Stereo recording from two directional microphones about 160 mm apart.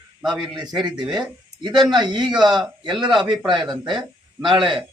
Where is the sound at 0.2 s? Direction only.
5° right (ahead or behind).